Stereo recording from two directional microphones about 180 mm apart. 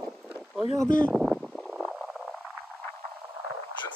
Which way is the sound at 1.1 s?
Centre (ahead or behind).